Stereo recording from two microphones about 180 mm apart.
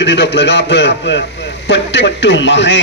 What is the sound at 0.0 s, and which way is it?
A man's voice, 70° left (ahead or behind).